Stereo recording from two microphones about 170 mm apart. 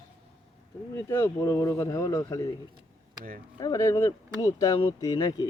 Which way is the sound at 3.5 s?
20° left (ahead or behind).